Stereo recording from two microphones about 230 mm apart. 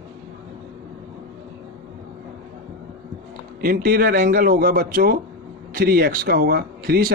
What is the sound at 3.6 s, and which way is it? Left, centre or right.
Speech, right.